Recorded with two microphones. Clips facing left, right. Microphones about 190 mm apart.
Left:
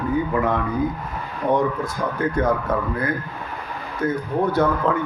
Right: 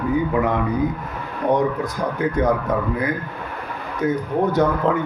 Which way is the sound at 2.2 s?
15° right (ahead or behind).